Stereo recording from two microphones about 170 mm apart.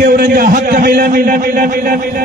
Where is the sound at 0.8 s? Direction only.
65° right (ahead or behind).